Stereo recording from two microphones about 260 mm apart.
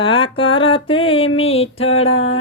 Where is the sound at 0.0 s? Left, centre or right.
Centre.